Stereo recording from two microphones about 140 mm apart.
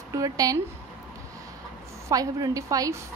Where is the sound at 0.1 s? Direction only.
25° right (ahead or behind).